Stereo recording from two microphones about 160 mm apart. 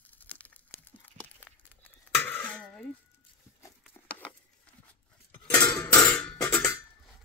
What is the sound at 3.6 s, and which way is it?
Patter, 10° left (ahead or behind).